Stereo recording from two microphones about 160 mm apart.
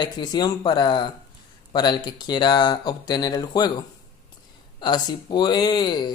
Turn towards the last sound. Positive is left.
turn(degrees=25)  # may be behind; listen again after turning